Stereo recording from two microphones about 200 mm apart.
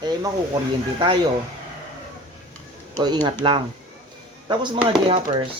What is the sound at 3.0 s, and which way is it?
Speech, 20° right (ahead or behind).